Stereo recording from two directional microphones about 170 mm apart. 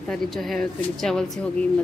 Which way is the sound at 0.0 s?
5° left (ahead or behind).